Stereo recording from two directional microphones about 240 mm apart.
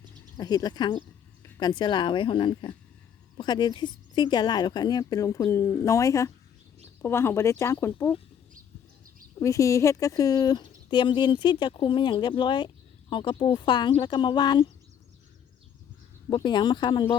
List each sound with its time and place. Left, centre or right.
0.3 s speech: centre
9.4 s speech: centre
16.3 s speech: centre